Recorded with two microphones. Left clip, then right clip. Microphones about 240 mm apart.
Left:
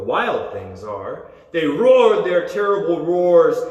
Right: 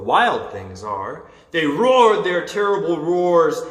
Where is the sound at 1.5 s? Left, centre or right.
Centre.